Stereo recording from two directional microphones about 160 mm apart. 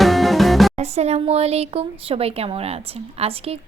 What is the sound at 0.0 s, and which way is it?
Music, centre (ahead or behind).